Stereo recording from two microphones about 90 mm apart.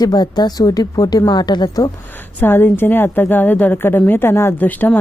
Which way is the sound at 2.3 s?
25° left (ahead or behind).